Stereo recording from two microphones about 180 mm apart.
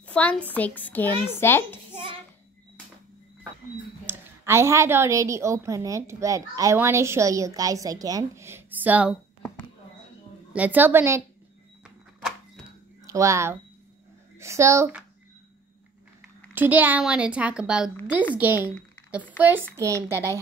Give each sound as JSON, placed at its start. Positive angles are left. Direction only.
{"t": 0.0, "sound": "a sound", "side_deg": 5}
{"t": 0.5, "sound": "a child's voice", "side_deg": 10}
{"t": 4.0, "sound": "a woman's voice", "side_deg": -15}
{"t": 10.5, "sound": "a woman's voice", "side_deg": -10}
{"t": 13.0, "sound": "a woman's voice", "side_deg": -15}
{"t": 16.5, "sound": "a woman's voice", "side_deg": -10}